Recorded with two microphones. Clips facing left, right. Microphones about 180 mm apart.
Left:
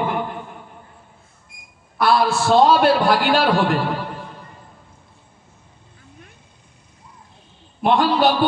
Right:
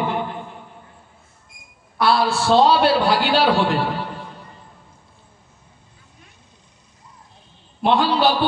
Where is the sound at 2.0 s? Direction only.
50° left (ahead or behind).